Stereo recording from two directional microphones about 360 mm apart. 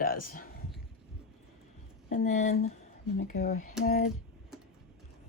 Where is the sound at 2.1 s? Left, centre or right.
Centre.